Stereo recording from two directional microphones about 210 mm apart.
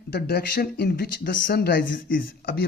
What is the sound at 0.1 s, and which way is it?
Speech, 50° left (ahead or behind).